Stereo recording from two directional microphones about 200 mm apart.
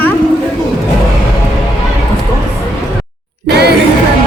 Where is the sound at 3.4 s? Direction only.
55° right (ahead or behind).